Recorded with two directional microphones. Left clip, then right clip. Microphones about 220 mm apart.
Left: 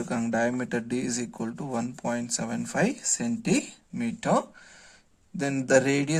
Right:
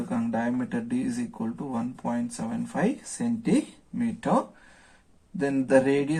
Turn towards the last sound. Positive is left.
turn(degrees=50)  # may be behind; listen again after turning